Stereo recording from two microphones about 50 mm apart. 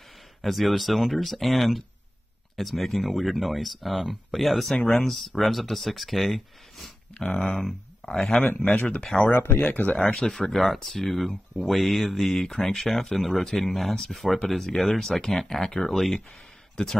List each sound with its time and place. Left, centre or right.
0.4 s speech: centre
7.2 s speech: left
7.5 s speech: centre
8.6 s speech: left
9.6 s speech: left
10.3 s speech: centre